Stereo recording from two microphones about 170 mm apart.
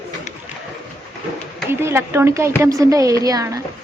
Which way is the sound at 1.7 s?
15° right (ahead or behind).